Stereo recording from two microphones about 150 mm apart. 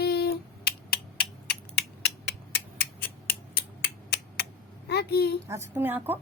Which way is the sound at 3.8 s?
90° left.